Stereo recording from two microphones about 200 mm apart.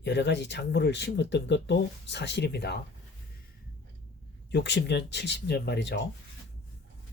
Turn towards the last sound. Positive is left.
turn(degrees=60)  # may be behind; listen again after turning